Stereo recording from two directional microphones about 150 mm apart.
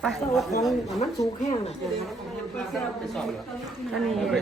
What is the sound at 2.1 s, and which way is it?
A man's voice, centre (ahead or behind).